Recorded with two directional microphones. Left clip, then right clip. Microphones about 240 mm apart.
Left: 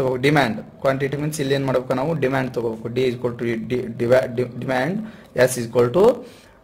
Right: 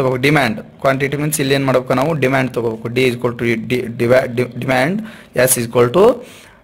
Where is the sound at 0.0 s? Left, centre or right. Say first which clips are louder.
Right 4 dB; right.